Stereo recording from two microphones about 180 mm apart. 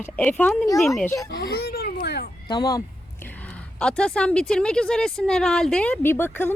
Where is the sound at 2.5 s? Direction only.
20° left (ahead or behind).